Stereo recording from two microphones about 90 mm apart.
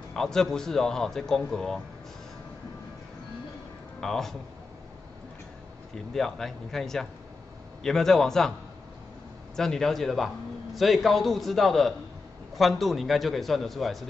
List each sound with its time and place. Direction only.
0.1 s a man's voice: 5° left (ahead or behind)
4.0 s a man's voice: 5° left (ahead or behind)
5.9 s a man's voice: 5° left (ahead or behind)
9.6 s a man's voice: 5° left (ahead or behind)